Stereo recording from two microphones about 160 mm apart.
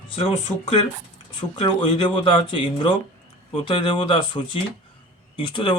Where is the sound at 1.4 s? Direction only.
30° left (ahead or behind).